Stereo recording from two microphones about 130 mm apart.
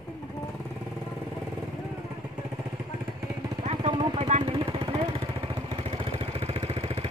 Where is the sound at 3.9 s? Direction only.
30° right (ahead or behind).